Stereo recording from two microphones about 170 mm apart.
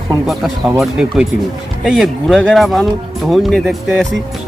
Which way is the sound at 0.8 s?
Centre (ahead or behind).